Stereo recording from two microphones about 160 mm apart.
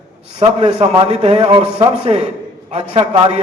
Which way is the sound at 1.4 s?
30° right (ahead or behind).